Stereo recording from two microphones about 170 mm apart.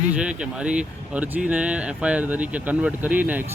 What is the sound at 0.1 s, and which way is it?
Speech, 5° right (ahead or behind).